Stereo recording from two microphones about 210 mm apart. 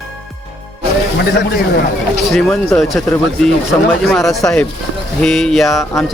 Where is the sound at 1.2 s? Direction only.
50° left (ahead or behind).